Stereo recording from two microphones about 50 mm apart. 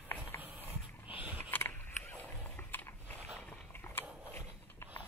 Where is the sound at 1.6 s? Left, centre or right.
Left.